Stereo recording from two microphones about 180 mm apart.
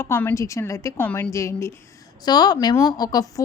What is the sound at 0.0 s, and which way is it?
A woman's voice, 10° left (ahead or behind).